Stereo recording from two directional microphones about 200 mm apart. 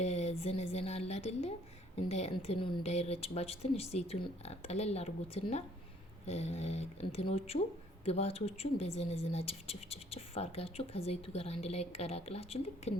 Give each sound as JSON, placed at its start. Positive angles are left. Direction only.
{"t": 0.0, "sound": "speech", "side_deg": 35}